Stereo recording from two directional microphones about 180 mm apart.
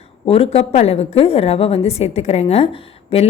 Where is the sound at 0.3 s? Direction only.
35° left (ahead or behind).